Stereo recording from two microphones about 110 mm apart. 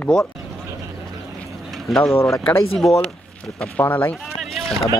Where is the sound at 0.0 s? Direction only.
10° left (ahead or behind).